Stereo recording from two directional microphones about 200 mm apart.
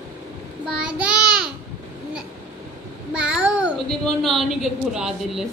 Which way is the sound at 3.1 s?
5° right (ahead or behind).